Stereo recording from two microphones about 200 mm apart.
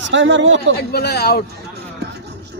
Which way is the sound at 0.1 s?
65° right (ahead or behind).